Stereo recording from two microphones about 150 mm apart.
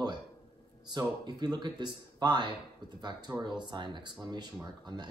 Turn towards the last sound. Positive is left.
turn(degrees=-30)  # may be behind; listen again after turning